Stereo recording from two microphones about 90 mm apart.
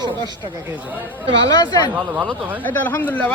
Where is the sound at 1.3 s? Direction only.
50° left (ahead or behind).